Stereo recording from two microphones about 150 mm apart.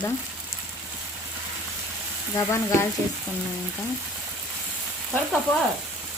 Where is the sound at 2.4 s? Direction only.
20° left (ahead or behind).